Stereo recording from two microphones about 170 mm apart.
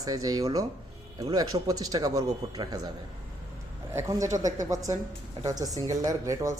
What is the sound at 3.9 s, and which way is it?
Speech, 15° right (ahead or behind).